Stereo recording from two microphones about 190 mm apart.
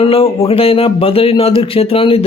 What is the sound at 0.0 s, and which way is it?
A man's voice, 30° left (ahead or behind).